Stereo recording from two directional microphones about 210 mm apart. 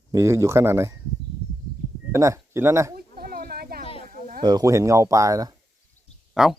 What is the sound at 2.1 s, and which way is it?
Speech, 15° right (ahead or behind).